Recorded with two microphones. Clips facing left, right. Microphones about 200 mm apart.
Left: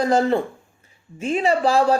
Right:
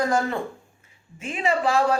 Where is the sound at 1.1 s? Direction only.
35° left (ahead or behind).